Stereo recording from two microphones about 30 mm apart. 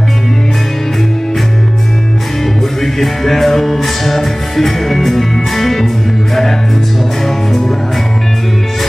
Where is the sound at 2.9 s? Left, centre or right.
Centre.